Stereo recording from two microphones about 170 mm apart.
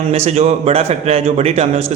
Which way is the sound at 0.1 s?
40° right (ahead or behind).